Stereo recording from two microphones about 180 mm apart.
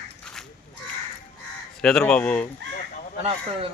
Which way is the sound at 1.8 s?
5° left (ahead or behind).